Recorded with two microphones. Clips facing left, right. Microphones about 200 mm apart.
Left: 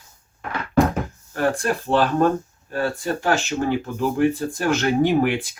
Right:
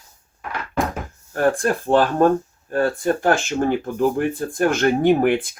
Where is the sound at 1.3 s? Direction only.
45° right (ahead or behind).